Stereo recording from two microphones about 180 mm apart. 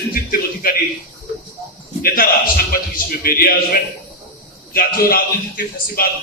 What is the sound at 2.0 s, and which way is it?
A man's voice, 55° left (ahead or behind).